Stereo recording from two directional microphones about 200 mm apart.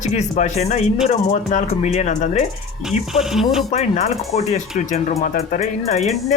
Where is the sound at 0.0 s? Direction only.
35° left (ahead or behind).